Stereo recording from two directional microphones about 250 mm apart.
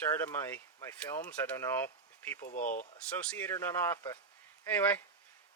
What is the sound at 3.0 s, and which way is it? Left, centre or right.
Speech, centre.